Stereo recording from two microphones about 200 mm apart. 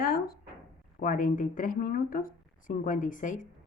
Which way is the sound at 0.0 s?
50° left (ahead or behind).